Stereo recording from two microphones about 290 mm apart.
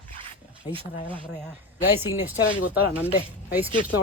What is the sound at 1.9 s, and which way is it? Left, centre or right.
Speech, centre.